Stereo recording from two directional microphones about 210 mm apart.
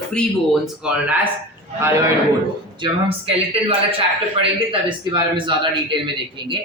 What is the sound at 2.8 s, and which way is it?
A man's voice, 25° right (ahead or behind).